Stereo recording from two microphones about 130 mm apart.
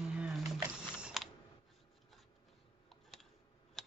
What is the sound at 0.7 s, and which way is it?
Mechanisms, 5° right (ahead or behind).